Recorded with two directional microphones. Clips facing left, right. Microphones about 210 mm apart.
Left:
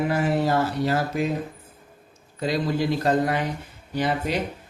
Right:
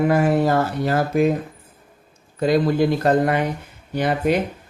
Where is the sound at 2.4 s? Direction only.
55° right (ahead or behind).